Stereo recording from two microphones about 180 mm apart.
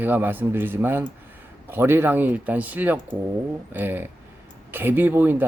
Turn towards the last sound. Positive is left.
turn(degrees=-10)  # may be behind; listen again after turning